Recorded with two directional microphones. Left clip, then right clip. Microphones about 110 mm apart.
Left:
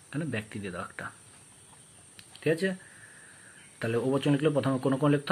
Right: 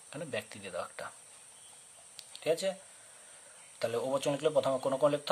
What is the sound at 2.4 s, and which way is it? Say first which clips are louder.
Speech: left 3 dB; 20° right (ahead or behind).